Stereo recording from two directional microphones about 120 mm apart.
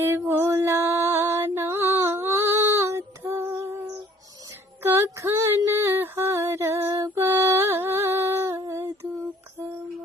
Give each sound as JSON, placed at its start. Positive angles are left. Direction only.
{"t": 0.0, "sound": "music", "side_deg": -20}
{"t": 4.8, "sound": "female singing", "side_deg": -20}